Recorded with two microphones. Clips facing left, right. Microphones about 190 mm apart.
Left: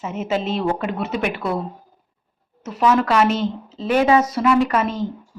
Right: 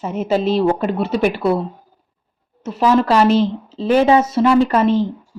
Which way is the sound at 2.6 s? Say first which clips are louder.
Right 3 dB; 30° right (ahead or behind).